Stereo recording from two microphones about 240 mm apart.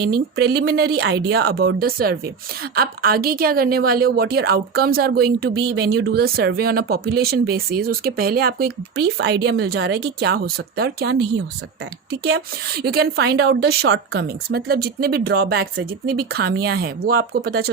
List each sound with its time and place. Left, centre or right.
0.0 s a woman's voice: right
12.2 s a woman's voice: right